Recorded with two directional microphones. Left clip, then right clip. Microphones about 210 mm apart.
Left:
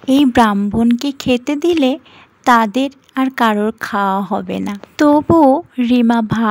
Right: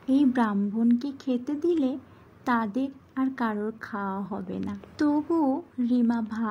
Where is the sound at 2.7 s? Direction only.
25° left (ahead or behind).